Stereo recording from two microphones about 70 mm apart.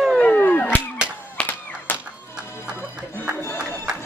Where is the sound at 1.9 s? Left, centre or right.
Left.